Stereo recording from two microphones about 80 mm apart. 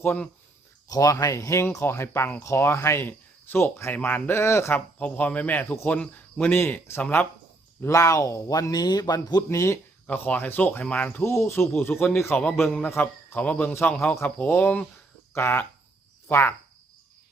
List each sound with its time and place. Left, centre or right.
0.0 s speech: centre
0.9 s speech: left
4.9 s speech: centre
6.0 s speech: centre
6.4 s speech: left
7.9 s speech: left
9.5 s speech: left
10.1 s speech: left
11.2 s speech: left
12.6 s a man's voice: centre
15.4 s speech: left